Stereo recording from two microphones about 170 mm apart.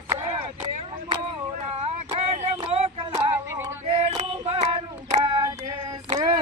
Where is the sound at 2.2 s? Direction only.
40° right (ahead or behind).